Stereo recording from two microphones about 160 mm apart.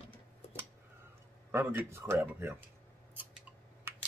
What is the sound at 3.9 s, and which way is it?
Typing, 15° right (ahead or behind).